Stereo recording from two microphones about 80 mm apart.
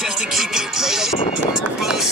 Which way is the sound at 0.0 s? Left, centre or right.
Centre.